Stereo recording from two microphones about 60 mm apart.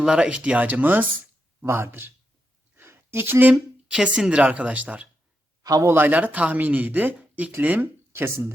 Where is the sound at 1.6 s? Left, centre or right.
Right.